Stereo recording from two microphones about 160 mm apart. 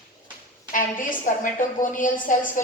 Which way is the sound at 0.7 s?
55° left (ahead or behind).